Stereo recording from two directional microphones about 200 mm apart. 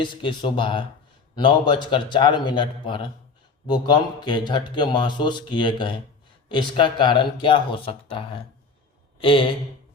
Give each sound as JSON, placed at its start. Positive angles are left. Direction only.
{"t": 0.0, "sound": "speech", "side_deg": 25}